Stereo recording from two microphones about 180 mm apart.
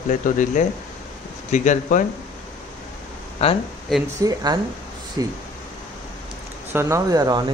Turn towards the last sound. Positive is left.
turn(degrees=-20)  # may be behind; listen again after turning